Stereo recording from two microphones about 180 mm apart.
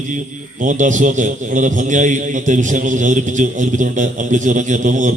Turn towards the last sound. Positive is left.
turn(degrees=-45)  # may be behind; listen again after turning